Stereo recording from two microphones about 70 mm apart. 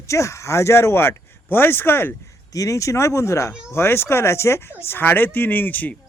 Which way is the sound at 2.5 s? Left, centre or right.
Left.